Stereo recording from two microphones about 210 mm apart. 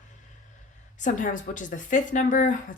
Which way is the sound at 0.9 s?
35° left (ahead or behind).